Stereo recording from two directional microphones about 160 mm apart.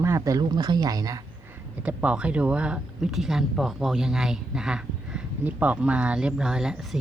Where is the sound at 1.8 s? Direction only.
10° right (ahead or behind).